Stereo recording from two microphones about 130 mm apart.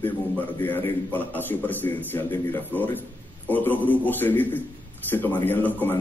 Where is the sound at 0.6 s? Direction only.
15° left (ahead or behind).